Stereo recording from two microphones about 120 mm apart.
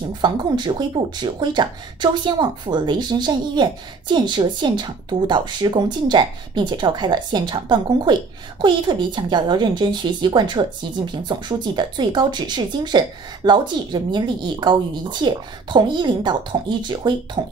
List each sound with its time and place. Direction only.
0.2 s a woman's voice: 40° right (ahead or behind)